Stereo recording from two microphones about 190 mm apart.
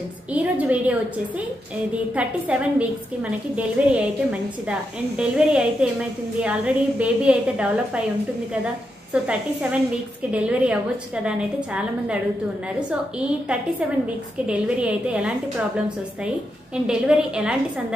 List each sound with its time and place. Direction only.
0.3 s a woman's voice: 5° right (ahead or behind)
2.1 s a woman's voice: 5° right (ahead or behind)
9.1 s a woman's voice: 5° right (ahead or behind)
14.4 s a woman's voice: 5° right (ahead or behind)
16.8 s a woman's voice: 5° right (ahead or behind)